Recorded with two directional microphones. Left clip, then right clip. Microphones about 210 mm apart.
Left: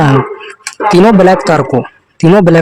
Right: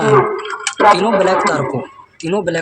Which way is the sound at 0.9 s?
50° left (ahead or behind).